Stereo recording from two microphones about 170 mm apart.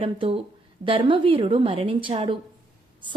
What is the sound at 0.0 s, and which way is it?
A woman's voice, 30° right (ahead or behind).